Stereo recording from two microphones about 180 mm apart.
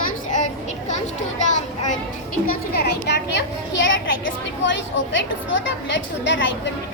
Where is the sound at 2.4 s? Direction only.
60° left (ahead or behind).